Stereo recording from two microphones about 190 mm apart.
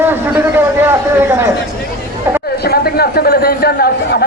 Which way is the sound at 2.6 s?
55° left (ahead or behind).